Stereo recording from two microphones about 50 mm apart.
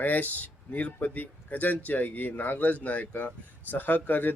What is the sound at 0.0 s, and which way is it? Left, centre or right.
Speech, left.